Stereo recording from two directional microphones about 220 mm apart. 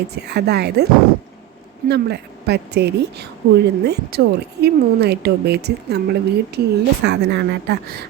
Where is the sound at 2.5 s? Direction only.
50° right (ahead or behind).